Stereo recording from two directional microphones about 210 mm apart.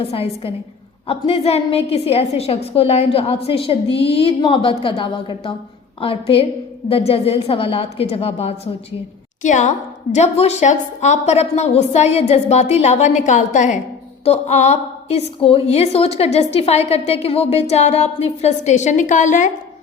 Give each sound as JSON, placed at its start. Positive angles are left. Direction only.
{"t": 0.0, "sound": "a woman's voice", "side_deg": 25}